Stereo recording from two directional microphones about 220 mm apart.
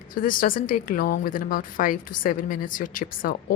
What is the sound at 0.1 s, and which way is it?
A woman's voice, 40° left (ahead or behind).